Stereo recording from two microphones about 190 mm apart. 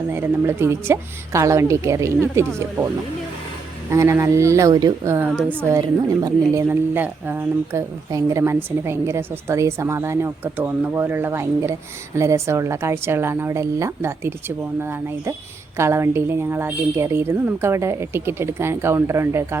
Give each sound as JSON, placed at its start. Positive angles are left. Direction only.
{"t": 0.1, "sound": "a woman's voice", "side_deg": -15}
{"t": 3.9, "sound": "a woman's voice", "side_deg": -15}